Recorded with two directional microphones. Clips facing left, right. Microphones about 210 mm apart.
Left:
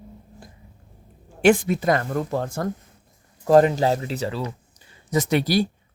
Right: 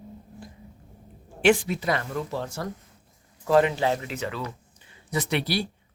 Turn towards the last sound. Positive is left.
turn(degrees=45)  # may be behind; listen again after turning